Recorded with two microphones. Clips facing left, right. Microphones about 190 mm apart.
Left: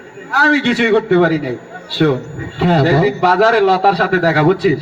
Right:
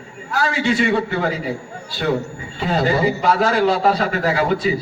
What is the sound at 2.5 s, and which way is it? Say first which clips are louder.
A man's voice: left 6 dB; 70° left (ahead or behind).